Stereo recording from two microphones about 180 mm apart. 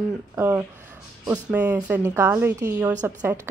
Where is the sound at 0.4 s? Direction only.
15° right (ahead or behind).